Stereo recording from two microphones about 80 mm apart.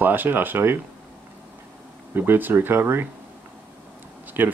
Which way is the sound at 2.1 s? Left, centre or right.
Right.